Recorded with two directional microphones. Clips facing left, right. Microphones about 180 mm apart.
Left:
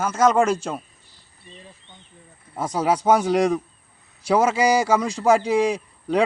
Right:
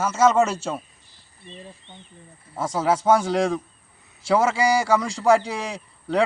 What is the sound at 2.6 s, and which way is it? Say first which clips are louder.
A man's voice: even; 15° left (ahead or behind).